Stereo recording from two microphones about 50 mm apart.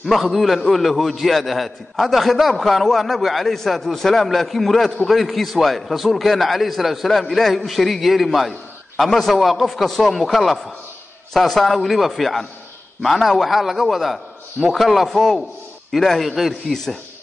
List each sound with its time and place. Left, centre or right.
0.0 s a man's voice: centre